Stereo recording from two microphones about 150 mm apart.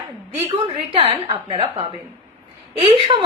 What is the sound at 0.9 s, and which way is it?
Speech, 35° right (ahead or behind).